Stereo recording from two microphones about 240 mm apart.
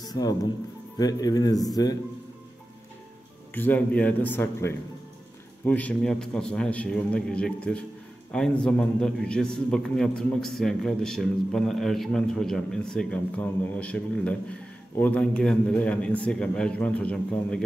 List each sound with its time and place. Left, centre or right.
0.0 s speech: centre
3.5 s a man's voice: centre